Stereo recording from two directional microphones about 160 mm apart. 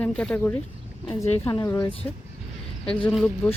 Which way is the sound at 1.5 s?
20° left (ahead or behind).